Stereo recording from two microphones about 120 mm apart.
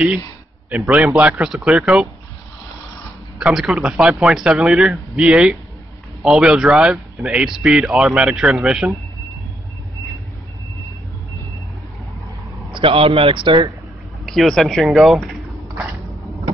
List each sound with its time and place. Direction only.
0.8 s a man's voice: 10° right (ahead or behind)
3.3 s speech: 5° right (ahead or behind)
12.7 s a man's voice: 50° right (ahead or behind)
14.2 s a man's voice: centre (ahead or behind)